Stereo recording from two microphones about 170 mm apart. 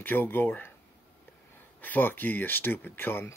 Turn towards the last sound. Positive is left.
turn(degrees=10)  # may be behind; listen again after turning